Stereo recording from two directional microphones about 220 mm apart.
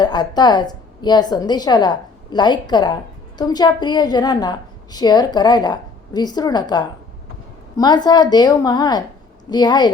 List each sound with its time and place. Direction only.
0.0 s a woman's voice: 20° left (ahead or behind)